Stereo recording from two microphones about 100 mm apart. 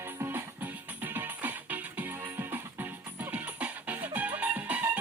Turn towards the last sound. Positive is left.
turn(degrees=-15)  # may be behind; listen again after turning